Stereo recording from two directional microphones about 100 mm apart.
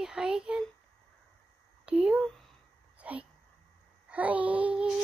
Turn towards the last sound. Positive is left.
turn(degrees=-10)  # may be behind; listen again after turning